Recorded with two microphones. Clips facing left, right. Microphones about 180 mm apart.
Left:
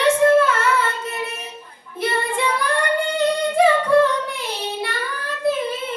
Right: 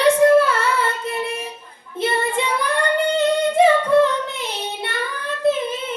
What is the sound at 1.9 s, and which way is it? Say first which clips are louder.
Child singing: right 2 dB; 20° right (ahead or behind).